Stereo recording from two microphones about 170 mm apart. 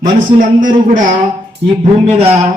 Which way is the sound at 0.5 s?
55° right (ahead or behind).